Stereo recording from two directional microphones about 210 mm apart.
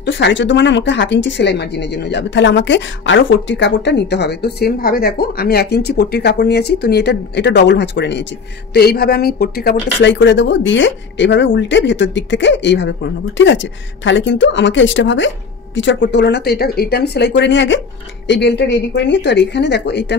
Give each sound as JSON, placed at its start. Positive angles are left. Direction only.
{"t": 0.0, "sound": "speech", "side_deg": 55}